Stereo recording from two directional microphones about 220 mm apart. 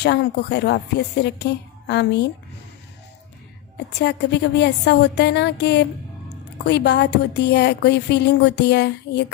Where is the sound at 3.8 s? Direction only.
50° left (ahead or behind).